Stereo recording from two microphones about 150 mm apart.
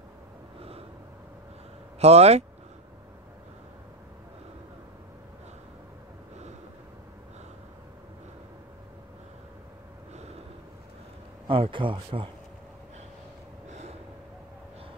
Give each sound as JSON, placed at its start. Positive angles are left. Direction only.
{"t": 0.6, "sound": "gasp", "side_deg": -40}
{"t": 2.0, "sound": "speech", "side_deg": -45}
{"t": 11.4, "sound": "speech", "side_deg": -35}
{"t": 13.7, "sound": "gasp", "side_deg": -50}